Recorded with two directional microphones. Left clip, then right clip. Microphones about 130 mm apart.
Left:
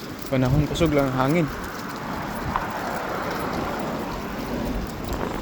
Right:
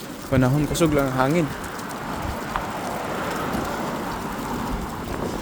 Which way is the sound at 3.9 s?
15° right (ahead or behind).